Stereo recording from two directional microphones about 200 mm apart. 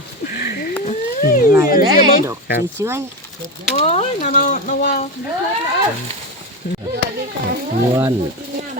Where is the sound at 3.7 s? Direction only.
35° left (ahead or behind).